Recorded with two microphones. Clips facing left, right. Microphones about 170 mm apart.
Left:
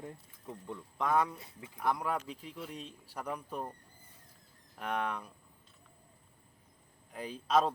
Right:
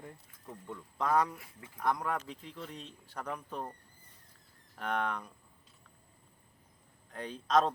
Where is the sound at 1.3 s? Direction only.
20° left (ahead or behind).